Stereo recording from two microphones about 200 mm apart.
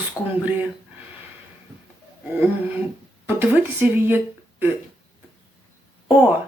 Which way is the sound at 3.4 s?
10° right (ahead or behind).